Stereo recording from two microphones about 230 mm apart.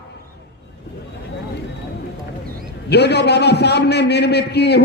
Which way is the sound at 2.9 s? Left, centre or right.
Left.